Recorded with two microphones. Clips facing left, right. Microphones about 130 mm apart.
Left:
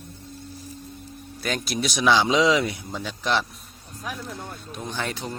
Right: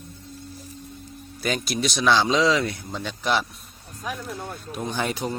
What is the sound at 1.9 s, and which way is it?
Speech, 15° left (ahead or behind).